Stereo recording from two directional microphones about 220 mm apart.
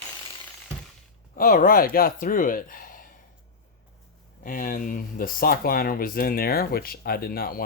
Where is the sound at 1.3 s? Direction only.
40° left (ahead or behind).